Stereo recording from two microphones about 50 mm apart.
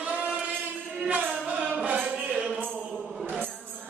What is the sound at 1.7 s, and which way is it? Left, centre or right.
Music, right.